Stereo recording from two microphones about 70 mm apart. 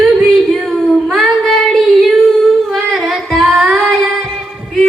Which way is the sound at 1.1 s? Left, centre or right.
Centre.